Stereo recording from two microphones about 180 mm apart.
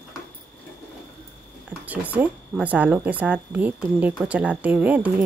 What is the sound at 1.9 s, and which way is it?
Speech, 10° right (ahead or behind).